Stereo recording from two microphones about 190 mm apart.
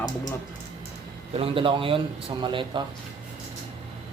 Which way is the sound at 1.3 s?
30° right (ahead or behind).